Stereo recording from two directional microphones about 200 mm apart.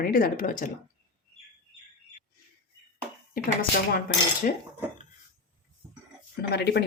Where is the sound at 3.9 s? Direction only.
50° left (ahead or behind).